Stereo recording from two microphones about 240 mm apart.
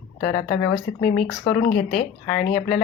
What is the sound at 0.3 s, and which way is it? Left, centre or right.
Speech, left.